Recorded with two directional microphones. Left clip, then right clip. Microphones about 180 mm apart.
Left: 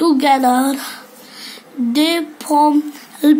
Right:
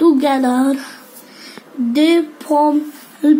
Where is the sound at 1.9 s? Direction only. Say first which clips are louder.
Right 3 dB; 45° left (ahead or behind).